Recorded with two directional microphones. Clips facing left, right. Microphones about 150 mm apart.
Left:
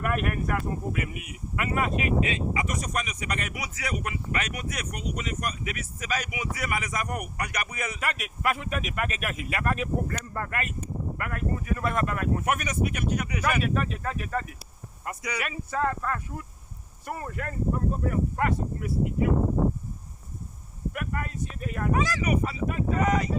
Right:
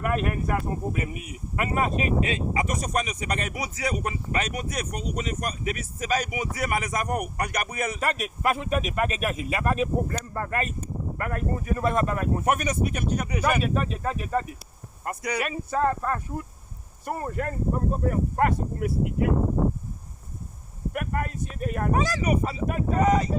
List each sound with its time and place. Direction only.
0.0 s speech: 25° right (ahead or behind)
15.0 s speech: 45° right (ahead or behind)
20.9 s speech: 45° right (ahead or behind)
22.6 s speech: 50° right (ahead or behind)
23.0 s speech: 30° right (ahead or behind)